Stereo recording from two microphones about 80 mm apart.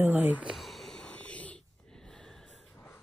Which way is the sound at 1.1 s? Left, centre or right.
Centre.